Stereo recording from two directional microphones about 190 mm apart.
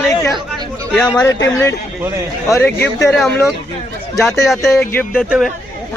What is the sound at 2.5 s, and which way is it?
Speech, 10° left (ahead or behind).